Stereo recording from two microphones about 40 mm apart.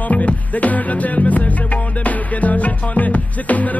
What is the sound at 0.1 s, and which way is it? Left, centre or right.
Music, left.